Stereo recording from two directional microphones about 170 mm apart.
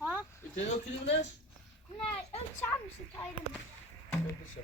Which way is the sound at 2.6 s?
15° left (ahead or behind).